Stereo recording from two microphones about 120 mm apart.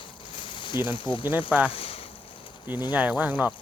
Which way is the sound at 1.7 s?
55° left (ahead or behind).